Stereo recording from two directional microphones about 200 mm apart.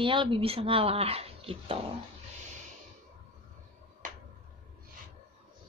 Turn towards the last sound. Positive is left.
turn(degrees=-40)  # may be behind; listen again after turning